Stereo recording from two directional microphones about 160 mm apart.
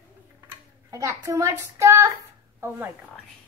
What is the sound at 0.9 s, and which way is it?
A child's voice, 20° right (ahead or behind).